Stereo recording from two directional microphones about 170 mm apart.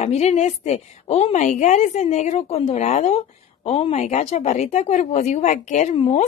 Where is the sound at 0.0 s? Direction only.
40° left (ahead or behind).